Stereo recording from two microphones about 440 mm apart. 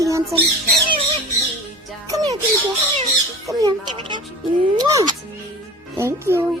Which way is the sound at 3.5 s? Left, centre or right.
Centre.